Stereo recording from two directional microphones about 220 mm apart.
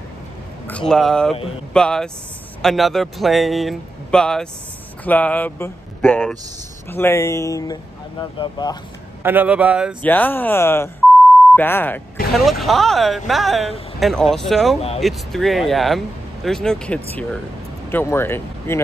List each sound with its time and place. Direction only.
0.7 s speech: 5° left (ahead or behind)
9.2 s a man's voice: 10° right (ahead or behind)
10.0 s speech: 10° left (ahead or behind)